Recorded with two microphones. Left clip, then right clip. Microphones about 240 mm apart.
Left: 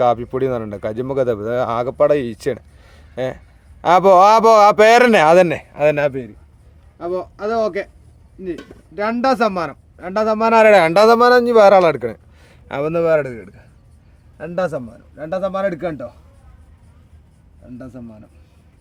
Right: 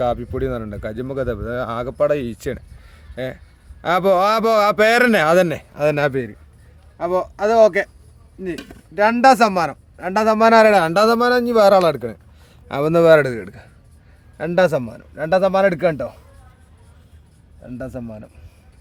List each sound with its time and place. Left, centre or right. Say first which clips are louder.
0.0 s a man's voice: left 5 dB; centre
9.0 s a man's voice: right 5 dB; right
15.2 s a man's voice: right 5 dB; right
17.7 s a man's voice: right 6 dB; right